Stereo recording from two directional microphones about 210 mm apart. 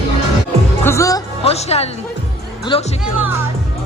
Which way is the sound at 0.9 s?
15° left (ahead or behind).